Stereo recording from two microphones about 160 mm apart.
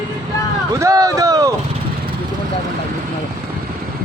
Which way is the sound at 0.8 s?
20° right (ahead or behind).